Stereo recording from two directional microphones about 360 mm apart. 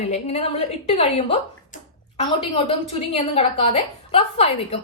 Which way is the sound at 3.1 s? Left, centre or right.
Centre.